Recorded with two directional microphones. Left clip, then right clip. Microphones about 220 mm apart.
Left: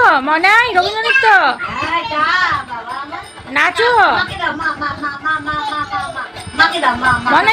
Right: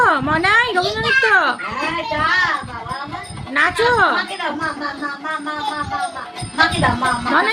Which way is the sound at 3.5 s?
10° right (ahead or behind).